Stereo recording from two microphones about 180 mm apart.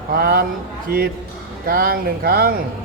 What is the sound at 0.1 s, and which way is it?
A man's voice, 55° right (ahead or behind).